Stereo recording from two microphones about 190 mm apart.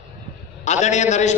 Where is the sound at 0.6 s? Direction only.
40° left (ahead or behind).